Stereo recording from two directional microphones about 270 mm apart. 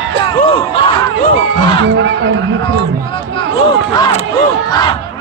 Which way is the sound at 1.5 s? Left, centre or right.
Right.